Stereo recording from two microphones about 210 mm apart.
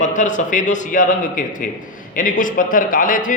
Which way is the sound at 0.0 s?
35° left (ahead or behind).